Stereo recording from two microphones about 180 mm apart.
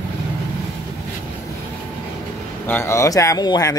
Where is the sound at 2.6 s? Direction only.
15° left (ahead or behind).